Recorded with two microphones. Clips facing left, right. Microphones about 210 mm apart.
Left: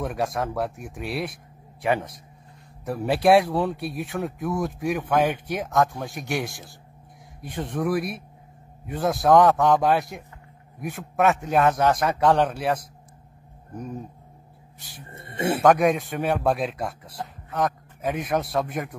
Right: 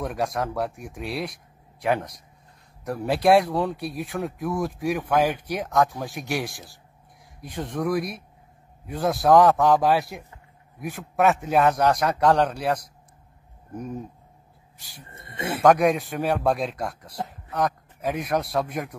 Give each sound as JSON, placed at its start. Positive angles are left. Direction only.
{"t": 0.0, "sound": "speech", "side_deg": 0}
{"t": 15.0, "sound": "speech", "side_deg": 25}
{"t": 15.6, "sound": "speech", "side_deg": 0}